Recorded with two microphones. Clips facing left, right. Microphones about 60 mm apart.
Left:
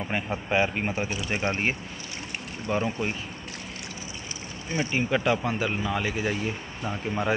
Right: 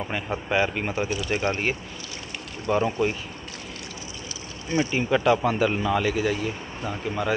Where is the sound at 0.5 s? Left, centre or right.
Centre.